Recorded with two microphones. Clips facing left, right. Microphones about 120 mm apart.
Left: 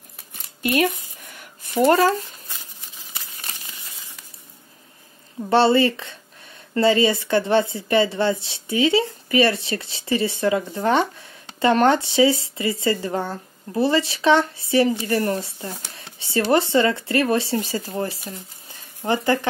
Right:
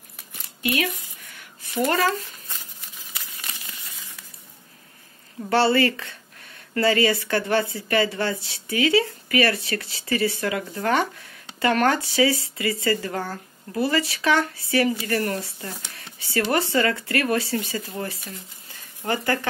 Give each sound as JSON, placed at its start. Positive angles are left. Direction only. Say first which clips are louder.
{"t": 0.6, "sound": "speech", "louder": "left 5 dB", "side_deg": 45}
{"t": 3.2, "sound": "crumpling", "louder": "left 1 dB", "side_deg": 25}
{"t": 5.5, "sound": "speech", "louder": "left 3 dB", "side_deg": 20}